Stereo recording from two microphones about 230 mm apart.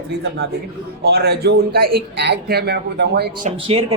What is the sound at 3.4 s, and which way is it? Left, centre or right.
Speech, right.